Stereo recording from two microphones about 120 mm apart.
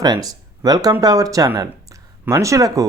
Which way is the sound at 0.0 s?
35° right (ahead or behind).